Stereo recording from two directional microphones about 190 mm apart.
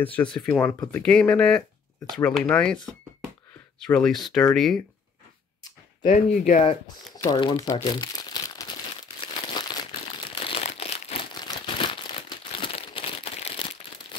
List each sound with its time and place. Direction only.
0.0 s speech: 5° left (ahead or behind)
6.0 s speech: 45° left (ahead or behind)
7.2 s speech: 20° left (ahead or behind)
9.3 s crumpling: 25° left (ahead or behind)